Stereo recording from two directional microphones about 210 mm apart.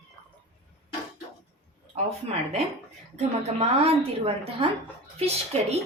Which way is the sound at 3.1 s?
30° right (ahead or behind).